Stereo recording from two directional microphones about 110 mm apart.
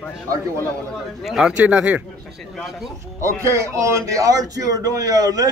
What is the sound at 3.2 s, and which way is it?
A man's voice, 25° right (ahead or behind).